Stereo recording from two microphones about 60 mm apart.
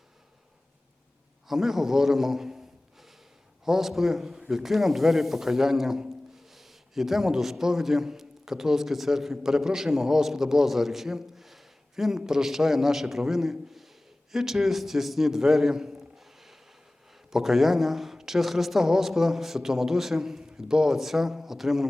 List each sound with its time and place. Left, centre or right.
1.5 s a man's voice: centre